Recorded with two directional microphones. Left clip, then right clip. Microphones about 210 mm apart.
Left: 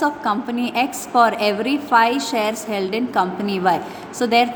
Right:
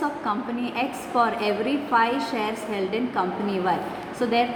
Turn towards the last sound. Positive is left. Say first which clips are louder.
# left 6 dB
turn(degrees=50)  # may be behind; listen again after turning